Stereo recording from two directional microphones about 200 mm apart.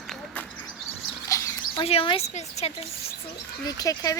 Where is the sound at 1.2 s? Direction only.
15° left (ahead or behind).